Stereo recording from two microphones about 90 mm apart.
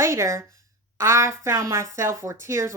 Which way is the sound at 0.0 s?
30° right (ahead or behind).